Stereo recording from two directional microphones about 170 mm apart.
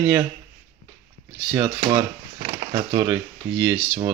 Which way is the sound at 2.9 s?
15° right (ahead or behind).